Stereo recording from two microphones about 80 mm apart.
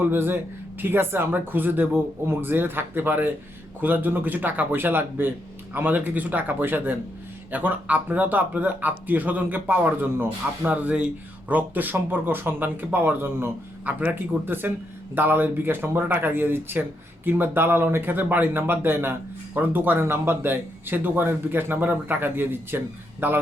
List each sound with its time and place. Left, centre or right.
0.0 s speech: right